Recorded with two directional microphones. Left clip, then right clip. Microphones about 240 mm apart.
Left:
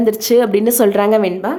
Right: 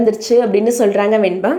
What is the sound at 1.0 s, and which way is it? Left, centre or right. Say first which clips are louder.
Speech: even; centre.